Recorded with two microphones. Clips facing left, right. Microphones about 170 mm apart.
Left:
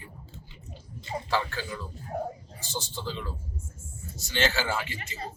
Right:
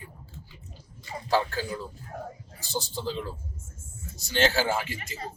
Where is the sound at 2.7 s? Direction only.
35° right (ahead or behind).